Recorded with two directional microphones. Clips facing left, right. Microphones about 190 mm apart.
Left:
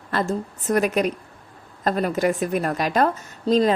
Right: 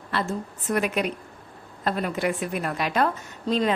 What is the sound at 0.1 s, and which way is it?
A woman's voice, 45° left (ahead or behind).